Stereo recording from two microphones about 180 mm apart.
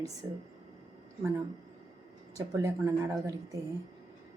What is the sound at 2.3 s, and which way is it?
Speech, 15° right (ahead or behind).